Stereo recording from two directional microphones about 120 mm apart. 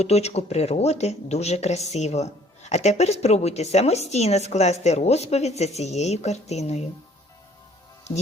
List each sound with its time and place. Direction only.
0.0 s speech: 60° left (ahead or behind)